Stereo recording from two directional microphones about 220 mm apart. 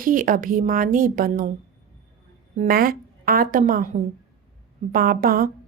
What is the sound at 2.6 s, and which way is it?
A woman's voice, 40° right (ahead or behind).